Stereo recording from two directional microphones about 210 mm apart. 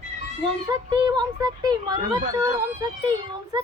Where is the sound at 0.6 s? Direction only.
20° right (ahead or behind).